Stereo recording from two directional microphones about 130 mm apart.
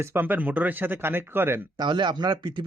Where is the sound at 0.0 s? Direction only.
15° right (ahead or behind).